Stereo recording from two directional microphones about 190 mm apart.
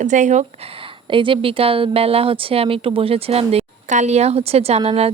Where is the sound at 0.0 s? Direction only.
40° right (ahead or behind).